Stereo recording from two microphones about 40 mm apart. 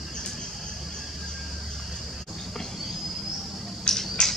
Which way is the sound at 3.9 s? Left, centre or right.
Centre.